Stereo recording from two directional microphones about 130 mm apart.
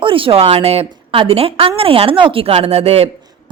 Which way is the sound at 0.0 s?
45° right (ahead or behind).